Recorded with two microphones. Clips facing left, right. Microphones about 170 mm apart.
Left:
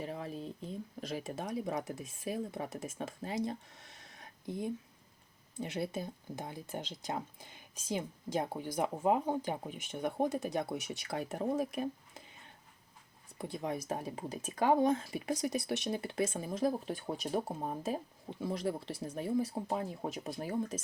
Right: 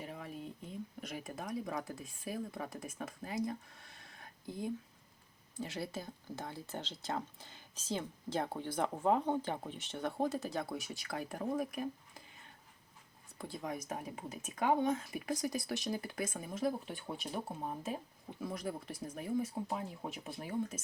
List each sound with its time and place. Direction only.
0.0 s speech: 35° left (ahead or behind)
13.4 s speech: 20° left (ahead or behind); by 20.8 s 35° left (ahead or behind)